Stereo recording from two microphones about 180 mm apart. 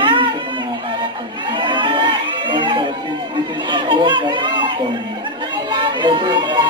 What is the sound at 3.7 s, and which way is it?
Speech, 25° right (ahead or behind).